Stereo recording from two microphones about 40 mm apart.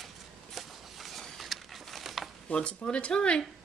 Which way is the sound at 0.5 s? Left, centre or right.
Centre.